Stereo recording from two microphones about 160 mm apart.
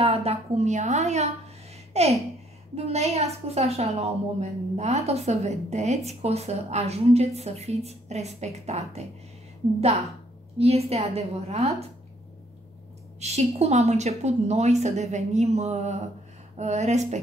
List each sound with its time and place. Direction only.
0.0 s a woman's voice: 40° right (ahead or behind)
10.6 s a woman's voice: 40° right (ahead or behind)
13.2 s a woman's voice: 40° right (ahead or behind)